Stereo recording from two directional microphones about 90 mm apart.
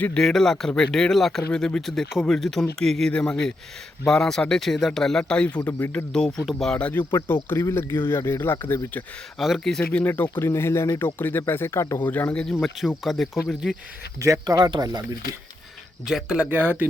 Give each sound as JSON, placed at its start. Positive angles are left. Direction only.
{"t": 0.0, "sound": "speech", "side_deg": 10}
{"t": 6.1, "sound": "speech", "side_deg": 5}
{"t": 6.7, "sound": "speech", "side_deg": 15}
{"t": 7.5, "sound": "speech", "side_deg": 35}
{"t": 9.4, "sound": "speech", "side_deg": 0}
{"t": 10.0, "sound": "speech", "side_deg": 20}
{"t": 12.0, "sound": "speech", "side_deg": 20}
{"t": 13.0, "sound": "speech", "side_deg": 0}
{"t": 14.2, "sound": "speech", "side_deg": -40}
{"t": 16.0, "sound": "speech", "side_deg": -5}
{"t": 16.4, "sound": "speech", "side_deg": -20}